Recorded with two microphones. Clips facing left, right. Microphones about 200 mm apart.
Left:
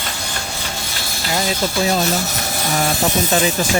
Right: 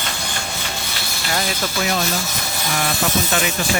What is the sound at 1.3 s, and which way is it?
Speech, 30° left (ahead or behind).